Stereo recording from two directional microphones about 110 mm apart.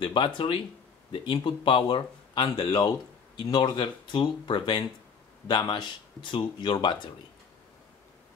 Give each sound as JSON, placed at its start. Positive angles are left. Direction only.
{"t": 0.0, "sound": "speech", "side_deg": 45}